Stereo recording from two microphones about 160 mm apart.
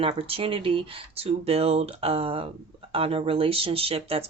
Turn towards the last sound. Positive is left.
turn(degrees=-40)  # may be behind; listen again after turning